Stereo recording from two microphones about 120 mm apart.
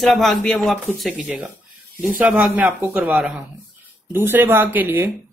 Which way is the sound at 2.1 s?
15° right (ahead or behind).